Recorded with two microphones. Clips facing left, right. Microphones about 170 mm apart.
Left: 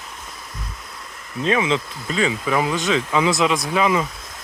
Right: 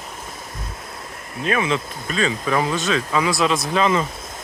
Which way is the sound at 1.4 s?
20° left (ahead or behind).